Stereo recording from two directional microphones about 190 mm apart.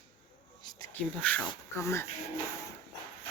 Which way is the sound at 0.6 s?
20° left (ahead or behind).